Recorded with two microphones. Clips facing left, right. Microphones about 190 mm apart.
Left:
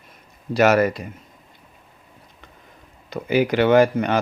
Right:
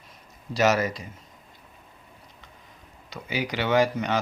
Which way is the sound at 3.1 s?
55° left (ahead or behind).